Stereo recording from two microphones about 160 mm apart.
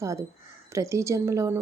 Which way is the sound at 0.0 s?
20° right (ahead or behind).